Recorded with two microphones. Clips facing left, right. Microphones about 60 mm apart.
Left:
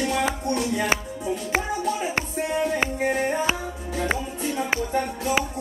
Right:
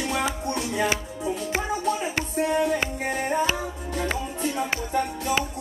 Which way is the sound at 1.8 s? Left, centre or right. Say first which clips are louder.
Even; centre.